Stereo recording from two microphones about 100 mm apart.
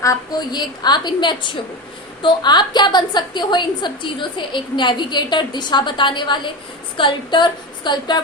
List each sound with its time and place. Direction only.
0.0 s a woman's voice: 30° left (ahead or behind)
0.5 s a woman's voice: 45° left (ahead or behind)